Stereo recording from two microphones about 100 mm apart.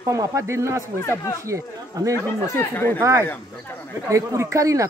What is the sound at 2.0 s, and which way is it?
Speech, 35° right (ahead or behind).